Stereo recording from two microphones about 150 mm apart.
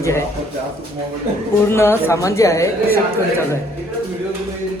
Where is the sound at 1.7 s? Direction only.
15° left (ahead or behind).